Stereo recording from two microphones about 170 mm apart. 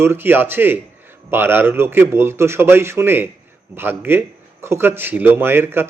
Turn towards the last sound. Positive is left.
turn(degrees=-15)  # may be behind; listen again after turning